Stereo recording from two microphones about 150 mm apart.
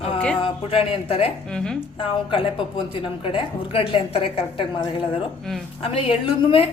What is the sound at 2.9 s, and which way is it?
Speech, 35° left (ahead or behind).